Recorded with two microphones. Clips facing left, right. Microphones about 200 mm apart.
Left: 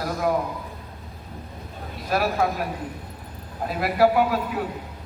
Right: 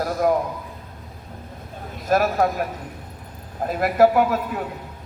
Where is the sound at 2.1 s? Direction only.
45° right (ahead or behind).